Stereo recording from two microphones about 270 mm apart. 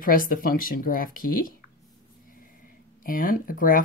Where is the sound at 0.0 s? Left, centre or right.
Left.